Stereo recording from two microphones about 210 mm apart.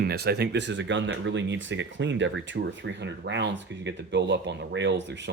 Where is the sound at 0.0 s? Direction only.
50° right (ahead or behind).